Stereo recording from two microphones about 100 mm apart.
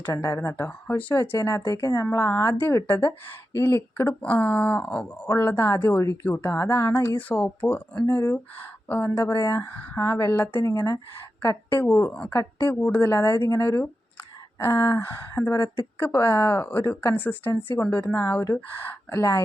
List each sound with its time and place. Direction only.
0.1 s speech: 30° left (ahead or behind)
7.2 s speech: 15° left (ahead or behind)
8.0 s speech: 25° left (ahead or behind)
10.7 s speech: 35° left (ahead or behind)
11.4 s speech: 20° left (ahead or behind)